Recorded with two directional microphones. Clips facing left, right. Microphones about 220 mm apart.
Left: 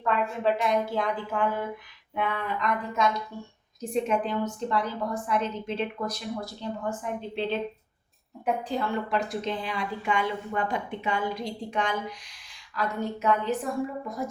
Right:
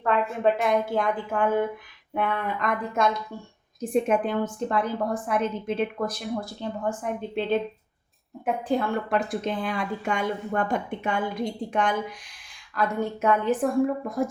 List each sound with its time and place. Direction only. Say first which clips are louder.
0.0 s speech: right 3 dB; 55° right (ahead or behind)
8.6 s speech: right 4 dB; 50° right (ahead or behind)